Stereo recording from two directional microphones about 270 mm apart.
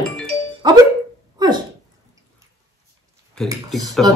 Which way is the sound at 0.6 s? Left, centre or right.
Centre.